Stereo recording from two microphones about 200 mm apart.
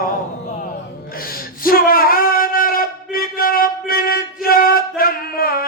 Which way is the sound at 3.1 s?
45° left (ahead or behind).